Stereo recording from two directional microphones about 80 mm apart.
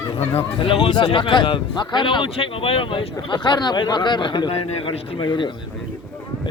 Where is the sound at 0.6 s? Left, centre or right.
Left.